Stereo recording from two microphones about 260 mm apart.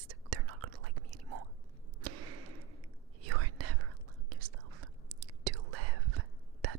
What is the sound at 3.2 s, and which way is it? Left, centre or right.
Whispering, right.